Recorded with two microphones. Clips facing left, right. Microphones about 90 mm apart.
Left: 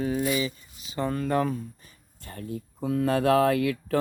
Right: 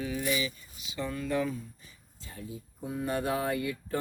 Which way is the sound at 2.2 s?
60° left (ahead or behind).